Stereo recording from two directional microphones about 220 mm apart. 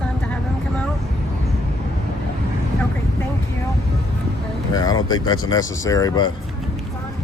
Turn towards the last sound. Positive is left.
turn(degrees=20)  # may be behind; listen again after turning